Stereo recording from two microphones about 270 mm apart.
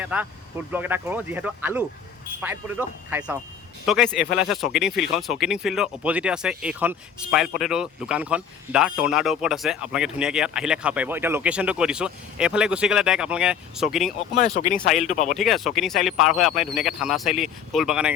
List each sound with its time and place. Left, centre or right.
0.0 s speech: centre
14.3 s speech: left
14.8 s speech: centre
15.0 s speech: left
15.4 s speech: centre